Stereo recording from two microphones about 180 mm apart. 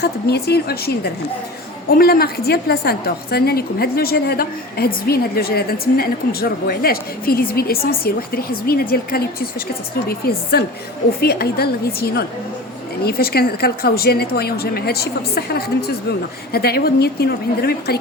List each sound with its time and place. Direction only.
0.0 s a woman's voice: 65° left (ahead or behind)